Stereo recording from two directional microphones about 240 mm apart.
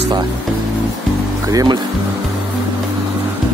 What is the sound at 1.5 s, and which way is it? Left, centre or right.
Speech, centre.